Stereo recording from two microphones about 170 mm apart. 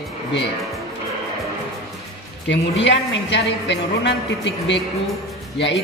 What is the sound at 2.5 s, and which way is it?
A woman's voice, 90° left.